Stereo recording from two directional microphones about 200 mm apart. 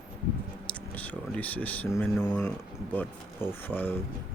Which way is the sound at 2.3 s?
10° left (ahead or behind).